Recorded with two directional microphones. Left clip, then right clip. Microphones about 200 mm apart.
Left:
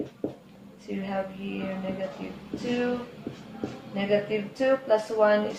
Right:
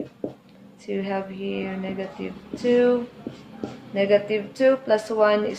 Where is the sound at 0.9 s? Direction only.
50° right (ahead or behind).